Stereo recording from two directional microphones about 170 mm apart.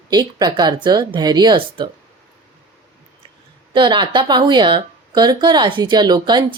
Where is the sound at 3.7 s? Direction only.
25° right (ahead or behind).